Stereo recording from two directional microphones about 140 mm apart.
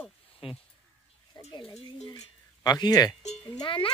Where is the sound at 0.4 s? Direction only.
40° left (ahead or behind).